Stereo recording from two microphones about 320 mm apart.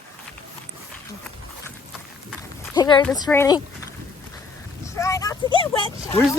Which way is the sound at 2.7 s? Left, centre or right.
Centre.